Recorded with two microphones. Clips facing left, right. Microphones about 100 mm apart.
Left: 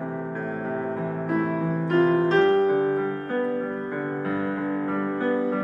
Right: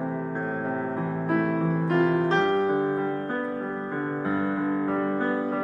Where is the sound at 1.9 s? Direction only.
20° right (ahead or behind).